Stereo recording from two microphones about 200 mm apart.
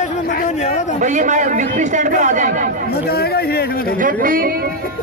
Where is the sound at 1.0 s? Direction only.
35° right (ahead or behind).